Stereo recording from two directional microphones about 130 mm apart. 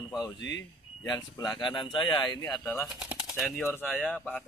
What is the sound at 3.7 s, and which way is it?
Speech, 15° left (ahead or behind).